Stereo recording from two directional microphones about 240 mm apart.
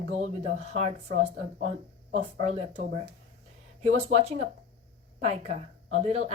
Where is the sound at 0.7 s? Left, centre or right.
Right.